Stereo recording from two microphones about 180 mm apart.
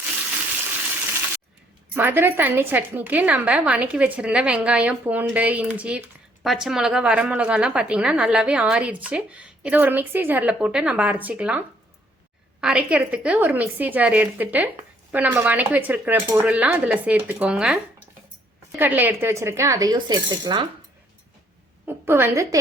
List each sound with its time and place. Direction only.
1.9 s a woman's voice: 10° right (ahead or behind)
18.8 s a woman's voice: 10° right (ahead or behind)
21.8 s a woman's voice: 15° right (ahead or behind)